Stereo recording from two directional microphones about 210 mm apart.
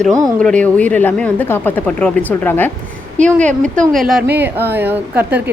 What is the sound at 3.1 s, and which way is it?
Speech, 35° right (ahead or behind).